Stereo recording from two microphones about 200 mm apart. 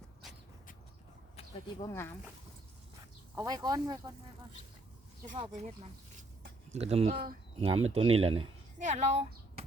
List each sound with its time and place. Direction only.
1.9 s speech: 10° left (ahead or behind)
3.3 s speech: 20° right (ahead or behind)
5.5 s speech: 35° right (ahead or behind)
6.4 s a sound: 35° right (ahead or behind)
7.1 s speech: 45° right (ahead or behind)
7.6 s speech: 30° right (ahead or behind)